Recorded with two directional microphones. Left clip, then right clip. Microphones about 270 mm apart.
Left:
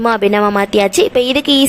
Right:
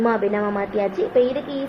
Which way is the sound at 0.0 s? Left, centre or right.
Left.